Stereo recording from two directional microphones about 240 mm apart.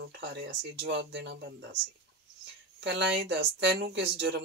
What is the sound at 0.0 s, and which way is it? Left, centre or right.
Speech, right.